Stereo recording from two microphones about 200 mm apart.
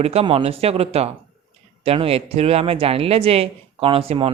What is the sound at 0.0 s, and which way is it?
Speech, 30° right (ahead or behind).